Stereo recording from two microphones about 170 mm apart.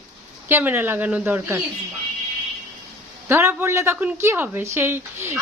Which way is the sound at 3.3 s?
15° right (ahead or behind).